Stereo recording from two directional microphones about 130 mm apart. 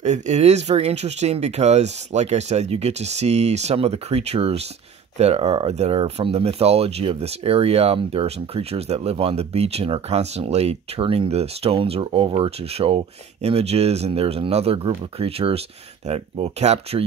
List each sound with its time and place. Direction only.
0.0 s speech: 65° right (ahead or behind)